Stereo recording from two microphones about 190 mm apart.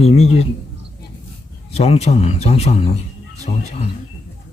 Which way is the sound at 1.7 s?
35° left (ahead or behind).